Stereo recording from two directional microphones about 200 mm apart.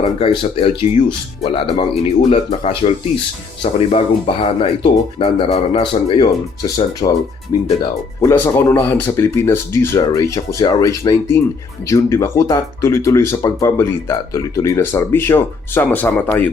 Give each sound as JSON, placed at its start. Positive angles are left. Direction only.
{"t": 0.0, "sound": "speech", "side_deg": 25}